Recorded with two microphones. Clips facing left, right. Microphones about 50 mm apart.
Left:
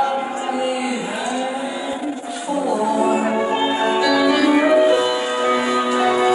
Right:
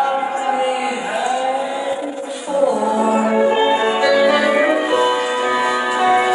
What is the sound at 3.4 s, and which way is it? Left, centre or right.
Music, centre.